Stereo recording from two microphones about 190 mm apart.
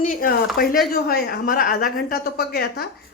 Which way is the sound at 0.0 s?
45° left (ahead or behind).